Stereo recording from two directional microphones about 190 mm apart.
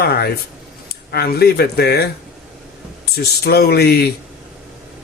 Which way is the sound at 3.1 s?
55° left (ahead or behind).